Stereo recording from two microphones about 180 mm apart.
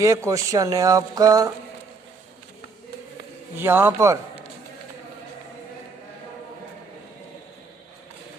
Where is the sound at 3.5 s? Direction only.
10° right (ahead or behind).